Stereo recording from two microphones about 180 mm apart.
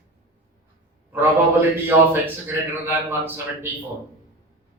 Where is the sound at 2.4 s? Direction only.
10° right (ahead or behind).